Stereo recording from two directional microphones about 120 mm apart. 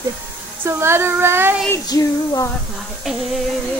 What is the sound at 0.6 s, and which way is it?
Child singing, 20° right (ahead or behind).